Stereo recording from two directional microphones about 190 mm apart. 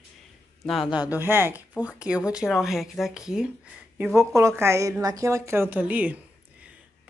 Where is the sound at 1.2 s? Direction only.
10° right (ahead or behind).